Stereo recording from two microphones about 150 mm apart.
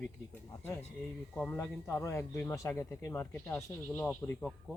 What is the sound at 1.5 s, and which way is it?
Speech, 15° left (ahead or behind).